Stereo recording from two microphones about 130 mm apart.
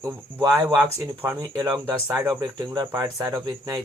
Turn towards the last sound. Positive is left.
turn(degrees=-25)  # may be behind; listen again after turning